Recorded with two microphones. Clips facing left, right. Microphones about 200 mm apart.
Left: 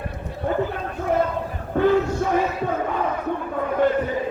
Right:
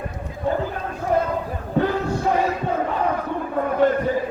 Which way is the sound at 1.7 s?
50° left (ahead or behind).